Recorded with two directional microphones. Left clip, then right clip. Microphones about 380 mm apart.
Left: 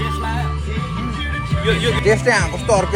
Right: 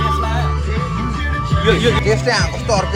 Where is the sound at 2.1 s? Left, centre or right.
Left.